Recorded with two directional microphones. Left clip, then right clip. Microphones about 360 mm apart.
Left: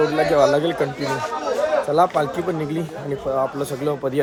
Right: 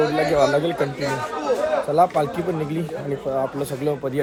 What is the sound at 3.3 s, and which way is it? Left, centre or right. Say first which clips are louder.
Speech: left 2 dB; centre.